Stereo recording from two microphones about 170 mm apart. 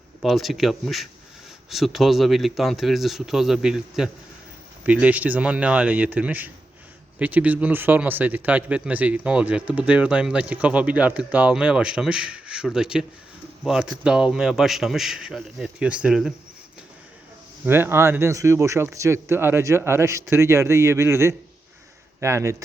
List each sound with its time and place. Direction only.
0.2 s a man's voice: centre (ahead or behind)
17.7 s a man's voice: 15° right (ahead or behind)